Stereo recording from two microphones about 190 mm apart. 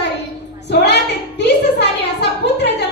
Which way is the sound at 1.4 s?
65° left (ahead or behind).